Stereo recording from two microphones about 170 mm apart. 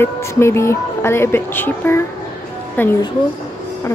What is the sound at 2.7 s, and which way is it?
Speech, 10° left (ahead or behind).